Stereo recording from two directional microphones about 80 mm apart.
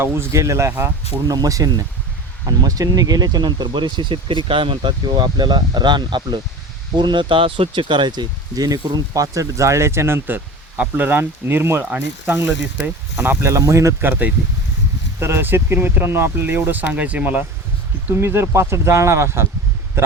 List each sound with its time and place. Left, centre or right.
0.0 s speech: right
14.1 s speech: right
15.2 s speech: right
18.1 s speech: right